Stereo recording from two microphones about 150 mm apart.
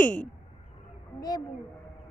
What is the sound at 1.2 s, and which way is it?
Speech, 25° left (ahead or behind).